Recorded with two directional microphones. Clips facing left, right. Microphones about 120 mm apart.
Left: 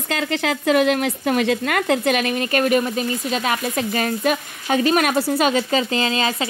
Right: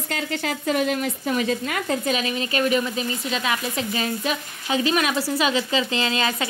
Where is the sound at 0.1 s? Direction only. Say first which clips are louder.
Left 5 dB; 90° left.